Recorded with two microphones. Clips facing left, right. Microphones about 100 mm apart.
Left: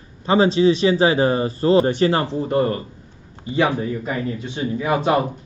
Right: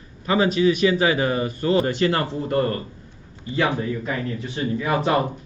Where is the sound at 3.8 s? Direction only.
15° left (ahead or behind).